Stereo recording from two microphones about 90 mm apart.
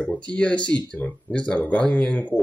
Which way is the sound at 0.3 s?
15° left (ahead or behind).